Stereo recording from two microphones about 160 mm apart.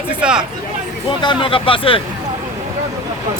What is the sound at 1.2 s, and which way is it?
Speech, 35° left (ahead or behind).